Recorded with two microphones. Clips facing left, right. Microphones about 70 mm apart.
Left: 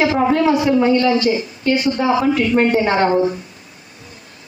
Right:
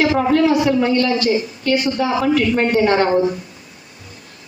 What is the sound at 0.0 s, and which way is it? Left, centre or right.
A woman's voice, left.